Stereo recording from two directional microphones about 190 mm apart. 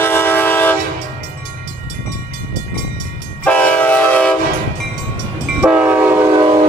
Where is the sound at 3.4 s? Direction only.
5° left (ahead or behind).